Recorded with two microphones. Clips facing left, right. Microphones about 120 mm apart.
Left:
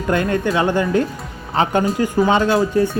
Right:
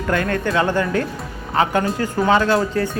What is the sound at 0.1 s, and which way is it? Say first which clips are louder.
Speech: left 2 dB; 20° left (ahead or behind).